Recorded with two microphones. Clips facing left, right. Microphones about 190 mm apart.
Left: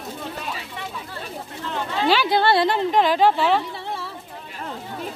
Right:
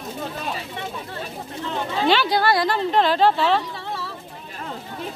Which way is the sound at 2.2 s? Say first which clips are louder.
Left 2 dB; 25° left (ahead or behind).